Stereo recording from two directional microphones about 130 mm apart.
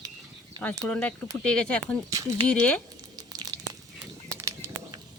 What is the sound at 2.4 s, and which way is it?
Speech, 10° left (ahead or behind).